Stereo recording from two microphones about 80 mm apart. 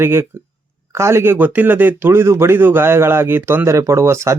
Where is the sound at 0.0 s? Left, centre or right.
Right.